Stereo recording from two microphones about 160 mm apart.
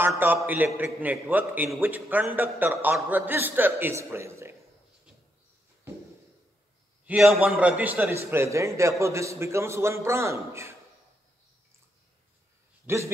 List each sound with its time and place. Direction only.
0.2 s a man's voice: 10° right (ahead or behind)
7.1 s a man's voice: centre (ahead or behind)
12.8 s a man's voice: 15° right (ahead or behind)